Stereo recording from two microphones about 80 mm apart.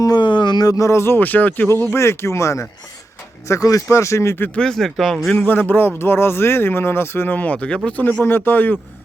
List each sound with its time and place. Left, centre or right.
0.2 s speech: left
3.6 s speech: left
3.8 s speech: left
4.5 s speech: centre
5.3 s speech: centre